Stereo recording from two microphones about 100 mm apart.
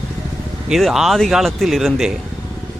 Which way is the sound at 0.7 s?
Centre (ahead or behind).